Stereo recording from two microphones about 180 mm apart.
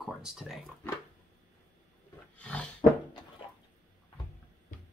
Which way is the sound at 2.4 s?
5° left (ahead or behind).